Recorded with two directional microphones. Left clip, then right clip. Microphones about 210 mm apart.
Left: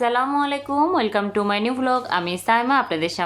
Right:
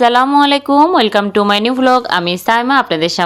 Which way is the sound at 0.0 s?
45° right (ahead or behind).